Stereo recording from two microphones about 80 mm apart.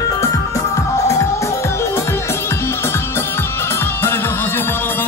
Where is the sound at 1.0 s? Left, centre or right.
Left.